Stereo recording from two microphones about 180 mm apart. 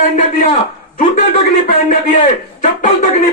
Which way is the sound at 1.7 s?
50° left (ahead or behind).